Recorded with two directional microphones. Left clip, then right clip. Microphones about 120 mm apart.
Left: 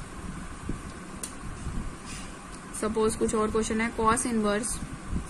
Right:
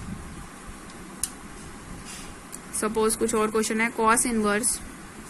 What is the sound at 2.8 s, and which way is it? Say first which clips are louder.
Speech: right 2 dB; 30° right (ahead or behind).